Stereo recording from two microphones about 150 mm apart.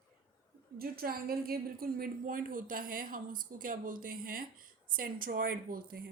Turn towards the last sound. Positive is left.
turn(degrees=-80)